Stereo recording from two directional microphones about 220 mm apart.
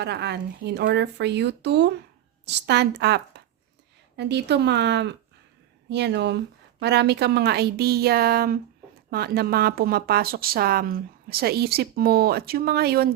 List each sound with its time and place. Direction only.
0.0 s a woman's voice: 50° right (ahead or behind)